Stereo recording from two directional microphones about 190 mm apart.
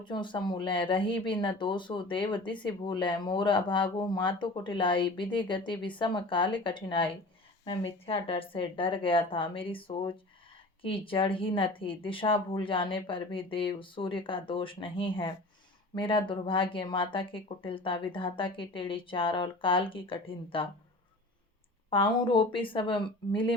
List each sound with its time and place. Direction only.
0.0 s speech: 25° left (ahead or behind)
21.8 s speech: 25° left (ahead or behind)